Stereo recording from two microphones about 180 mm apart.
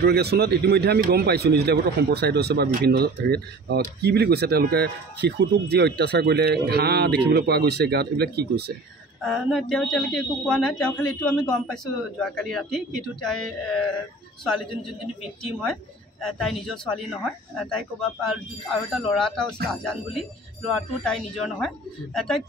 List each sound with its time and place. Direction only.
0.0 s speech: 65° right (ahead or behind)
9.2 s speech: centre (ahead or behind)